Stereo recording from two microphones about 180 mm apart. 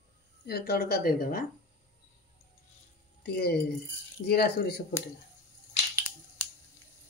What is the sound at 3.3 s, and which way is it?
Speech, 60° left (ahead or behind).